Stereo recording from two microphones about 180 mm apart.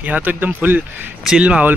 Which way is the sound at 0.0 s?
10° right (ahead or behind).